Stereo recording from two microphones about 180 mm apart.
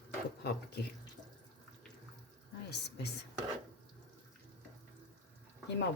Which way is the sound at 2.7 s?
65° left (ahead or behind).